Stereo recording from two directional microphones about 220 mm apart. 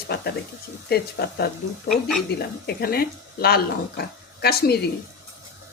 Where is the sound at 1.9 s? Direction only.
Centre (ahead or behind).